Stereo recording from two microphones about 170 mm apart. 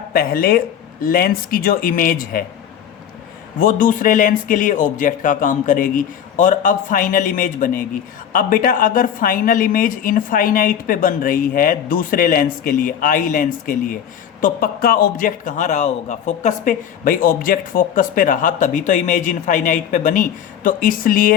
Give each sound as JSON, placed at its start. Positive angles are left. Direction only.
{"t": 0.1, "sound": "a woman's voice", "side_deg": 60}
{"t": 3.6, "sound": "a man's voice", "side_deg": 55}